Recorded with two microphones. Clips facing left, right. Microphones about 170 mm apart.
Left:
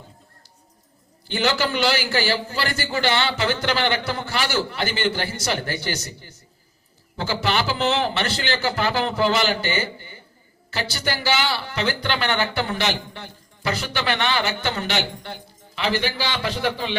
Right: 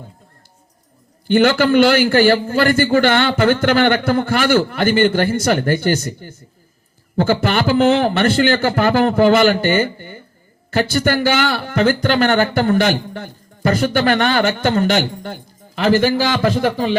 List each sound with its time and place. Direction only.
1.3 s a man's voice: 50° right (ahead or behind)